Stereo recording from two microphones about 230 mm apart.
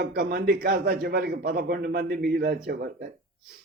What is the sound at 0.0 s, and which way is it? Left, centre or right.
A man's voice, right.